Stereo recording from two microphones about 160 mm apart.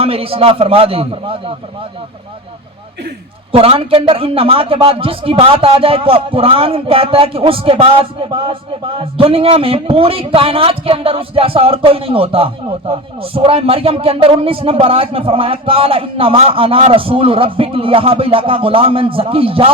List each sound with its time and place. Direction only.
0.0 s a man's voice: 35° right (ahead or behind)
3.5 s a man's voice: 35° right (ahead or behind)